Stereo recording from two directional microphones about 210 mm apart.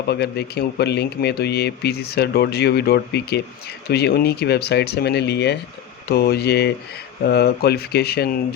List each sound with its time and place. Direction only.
0.1 s speech: 50° left (ahead or behind)